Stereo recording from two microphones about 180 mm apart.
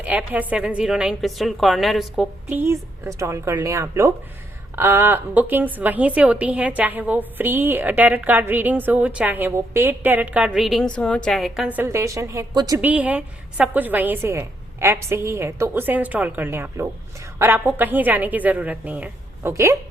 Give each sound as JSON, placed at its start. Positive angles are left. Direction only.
{"t": 0.0, "sound": "a woman's voice", "side_deg": -5}
{"t": 11.8, "sound": "a woman's voice", "side_deg": -15}